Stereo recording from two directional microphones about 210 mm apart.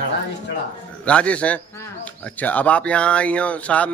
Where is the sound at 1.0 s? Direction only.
5° left (ahead or behind).